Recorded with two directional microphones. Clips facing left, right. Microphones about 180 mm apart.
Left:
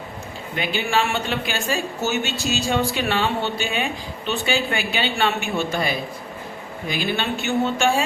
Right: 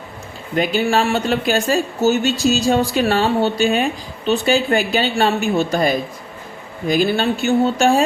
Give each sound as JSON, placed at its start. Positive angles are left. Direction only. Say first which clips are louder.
{"t": 0.5, "sound": "a woman's voice", "louder": "right 6 dB", "side_deg": -40}